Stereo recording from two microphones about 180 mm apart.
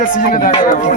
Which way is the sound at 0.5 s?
35° left (ahead or behind).